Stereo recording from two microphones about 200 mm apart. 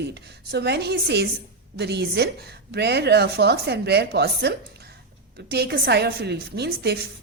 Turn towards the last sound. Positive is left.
turn(degrees=-55)  # may be behind; listen again after turning